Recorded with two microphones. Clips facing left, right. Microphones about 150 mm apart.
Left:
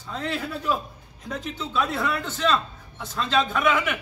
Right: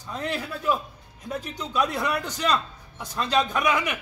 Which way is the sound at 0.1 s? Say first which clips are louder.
Even; 15° right (ahead or behind).